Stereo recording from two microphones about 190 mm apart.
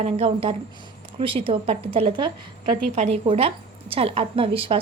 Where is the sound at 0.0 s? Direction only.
30° right (ahead or behind).